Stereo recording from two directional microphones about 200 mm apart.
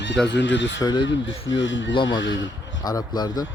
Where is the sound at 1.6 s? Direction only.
70° left (ahead or behind).